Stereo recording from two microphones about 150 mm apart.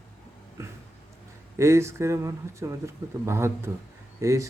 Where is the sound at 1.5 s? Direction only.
20° right (ahead or behind).